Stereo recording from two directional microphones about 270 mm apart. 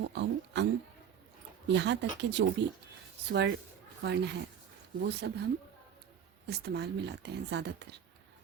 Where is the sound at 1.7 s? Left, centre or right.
Right.